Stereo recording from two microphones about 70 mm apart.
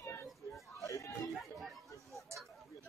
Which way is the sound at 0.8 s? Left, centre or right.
Left.